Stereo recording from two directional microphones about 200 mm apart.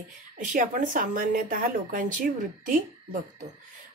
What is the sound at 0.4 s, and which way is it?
A woman's voice, 40° right (ahead or behind).